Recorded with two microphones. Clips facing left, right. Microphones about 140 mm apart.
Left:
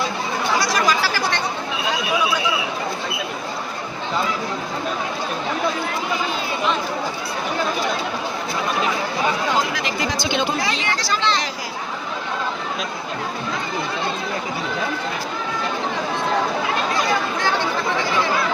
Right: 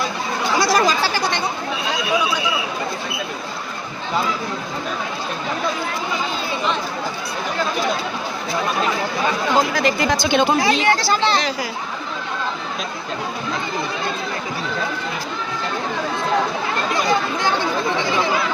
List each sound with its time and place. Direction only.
0.6 s chatter: 30° right (ahead or behind)
9.7 s speech: 50° right (ahead or behind)
10.8 s speech: 30° right (ahead or behind)